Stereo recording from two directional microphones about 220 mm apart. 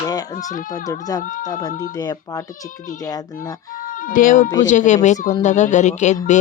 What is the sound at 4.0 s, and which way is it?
Speech, 40° left (ahead or behind).